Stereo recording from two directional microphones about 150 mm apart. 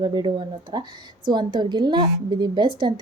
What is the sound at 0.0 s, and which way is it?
A woman's voice, 30° right (ahead or behind).